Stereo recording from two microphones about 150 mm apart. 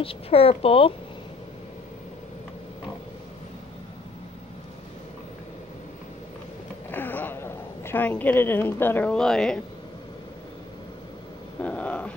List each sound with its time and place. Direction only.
0.0 s speech: 40° left (ahead or behind)
6.9 s a sound: 10° left (ahead or behind)
11.6 s dog: 10° left (ahead or behind)